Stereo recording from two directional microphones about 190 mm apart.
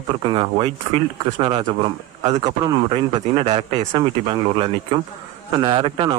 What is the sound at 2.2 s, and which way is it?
Speech, 40° right (ahead or behind).